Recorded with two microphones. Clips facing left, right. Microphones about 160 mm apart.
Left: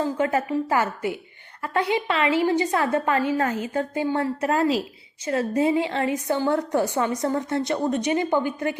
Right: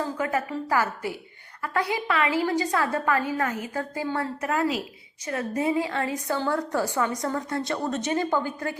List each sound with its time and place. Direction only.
0.2 s a woman's voice: 25° left (ahead or behind)